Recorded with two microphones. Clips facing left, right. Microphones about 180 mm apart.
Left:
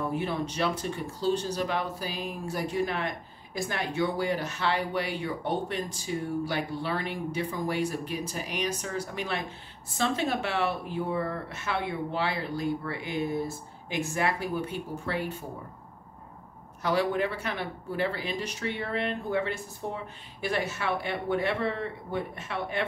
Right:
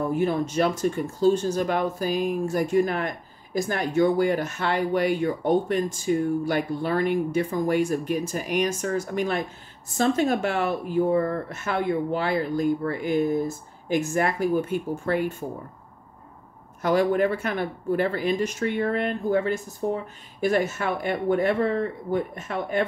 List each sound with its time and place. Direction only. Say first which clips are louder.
0.1 s speech: right 7 dB; 45° right (ahead or behind)
16.8 s speech: right 6 dB; 45° right (ahead or behind)